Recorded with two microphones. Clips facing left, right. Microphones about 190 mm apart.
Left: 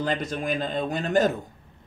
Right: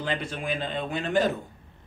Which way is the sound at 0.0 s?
40° left (ahead or behind).